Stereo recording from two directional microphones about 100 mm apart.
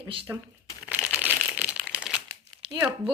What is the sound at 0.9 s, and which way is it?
Crumpling, 15° right (ahead or behind).